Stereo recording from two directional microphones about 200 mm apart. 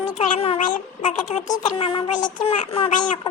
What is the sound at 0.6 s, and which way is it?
Speech, 40° left (ahead or behind).